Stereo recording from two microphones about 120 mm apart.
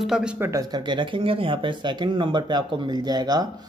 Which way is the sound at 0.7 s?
40° right (ahead or behind).